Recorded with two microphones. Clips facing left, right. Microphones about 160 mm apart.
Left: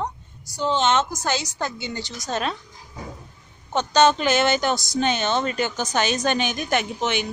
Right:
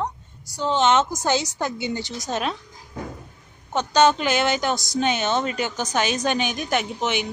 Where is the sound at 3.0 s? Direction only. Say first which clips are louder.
Right 4 dB; 60° right (ahead or behind).